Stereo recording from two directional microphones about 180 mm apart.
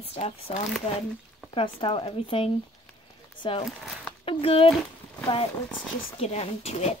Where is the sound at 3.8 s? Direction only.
Centre (ahead or behind).